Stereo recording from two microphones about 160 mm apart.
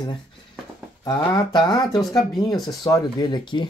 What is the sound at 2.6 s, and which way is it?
Speech, 25° left (ahead or behind).